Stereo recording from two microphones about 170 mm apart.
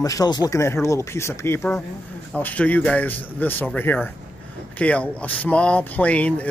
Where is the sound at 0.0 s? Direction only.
20° left (ahead or behind).